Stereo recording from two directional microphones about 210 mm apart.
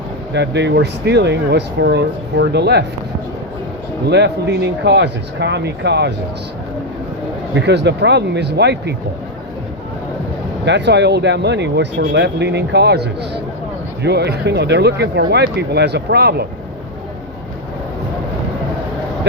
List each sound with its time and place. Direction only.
0.3 s speech: 55° right (ahead or behind)
4.1 s speech: 55° right (ahead or behind)
7.5 s speech: 55° right (ahead or behind)
10.7 s speech: 55° right (ahead or behind)